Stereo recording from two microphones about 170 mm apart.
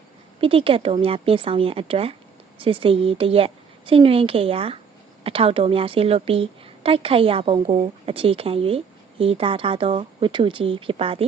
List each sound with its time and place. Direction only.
0.3 s a woman's voice: 30° right (ahead or behind)